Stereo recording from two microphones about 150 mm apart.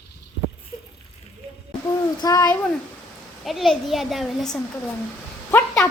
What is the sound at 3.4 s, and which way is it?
Speech, centre (ahead or behind).